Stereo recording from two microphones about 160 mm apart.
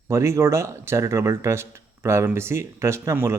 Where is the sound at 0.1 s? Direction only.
15° right (ahead or behind).